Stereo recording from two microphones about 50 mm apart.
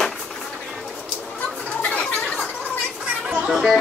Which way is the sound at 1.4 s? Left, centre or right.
Left.